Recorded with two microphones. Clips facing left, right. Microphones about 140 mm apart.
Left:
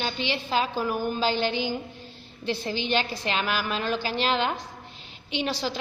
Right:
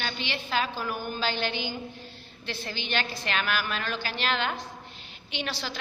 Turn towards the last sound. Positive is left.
turn(degrees=35)  # may be behind; listen again after turning